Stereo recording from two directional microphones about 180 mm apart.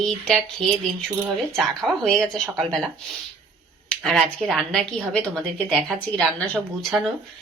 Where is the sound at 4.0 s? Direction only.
Centre (ahead or behind).